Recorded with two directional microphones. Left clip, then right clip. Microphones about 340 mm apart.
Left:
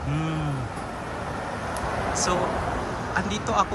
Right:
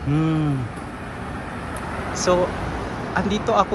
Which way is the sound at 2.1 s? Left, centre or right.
Centre.